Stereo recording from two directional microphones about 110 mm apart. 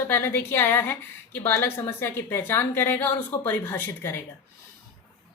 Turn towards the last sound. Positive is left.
turn(degrees=20)  # may be behind; listen again after turning